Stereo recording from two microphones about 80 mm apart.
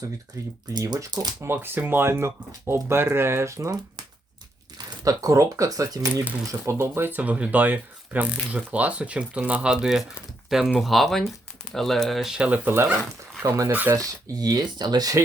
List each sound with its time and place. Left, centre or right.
0.4 s speech: right
0.7 s speech: right
1.4 s speech: right
5.0 s speech: right
6.5 s speech: right; by 12.5 s centre
12.5 s speech: right
13.9 s speech: right